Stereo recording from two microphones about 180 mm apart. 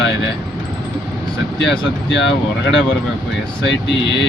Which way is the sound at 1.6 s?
75° left (ahead or behind).